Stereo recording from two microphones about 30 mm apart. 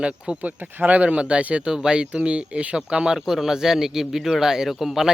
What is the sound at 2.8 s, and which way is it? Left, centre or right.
Speech, right.